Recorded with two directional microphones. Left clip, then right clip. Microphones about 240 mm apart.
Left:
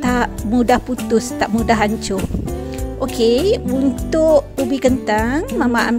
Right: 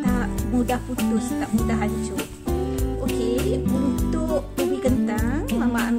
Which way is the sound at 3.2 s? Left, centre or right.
Left.